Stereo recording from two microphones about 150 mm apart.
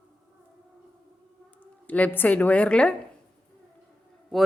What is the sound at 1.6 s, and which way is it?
Speech, 10° left (ahead or behind).